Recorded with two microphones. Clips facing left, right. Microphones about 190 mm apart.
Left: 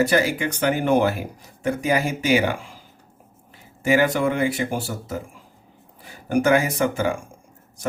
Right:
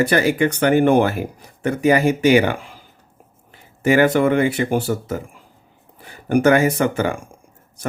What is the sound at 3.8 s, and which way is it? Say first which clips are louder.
Speech: right 4 dB; 60° right (ahead or behind).